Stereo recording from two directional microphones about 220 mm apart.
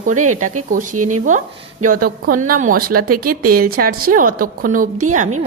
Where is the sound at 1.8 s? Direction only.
40° right (ahead or behind).